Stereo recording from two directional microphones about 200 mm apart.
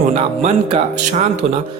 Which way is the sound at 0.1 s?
30° right (ahead or behind).